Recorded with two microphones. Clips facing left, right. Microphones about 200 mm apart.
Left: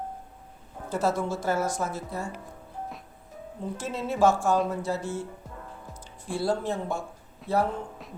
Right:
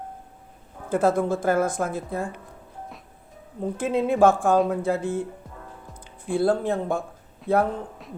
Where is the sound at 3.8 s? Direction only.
55° right (ahead or behind).